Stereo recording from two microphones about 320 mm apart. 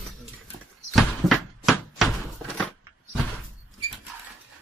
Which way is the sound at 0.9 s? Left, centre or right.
Centre.